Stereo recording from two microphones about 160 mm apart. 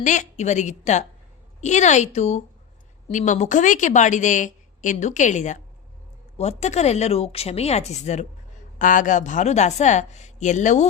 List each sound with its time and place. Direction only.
0.0 s a woman's voice: 50° left (ahead or behind)